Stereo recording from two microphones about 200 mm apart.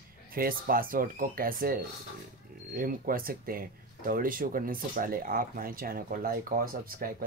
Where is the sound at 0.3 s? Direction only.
45° right (ahead or behind).